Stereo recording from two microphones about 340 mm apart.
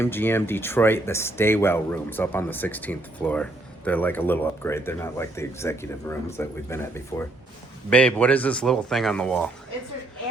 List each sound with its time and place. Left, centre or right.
0.0 s speech: centre